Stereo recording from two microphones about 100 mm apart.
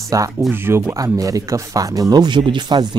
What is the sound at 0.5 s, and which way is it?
Speech, 25° right (ahead or behind).